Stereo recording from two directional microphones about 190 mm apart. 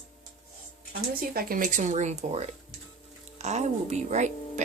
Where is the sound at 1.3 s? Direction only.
50° right (ahead or behind).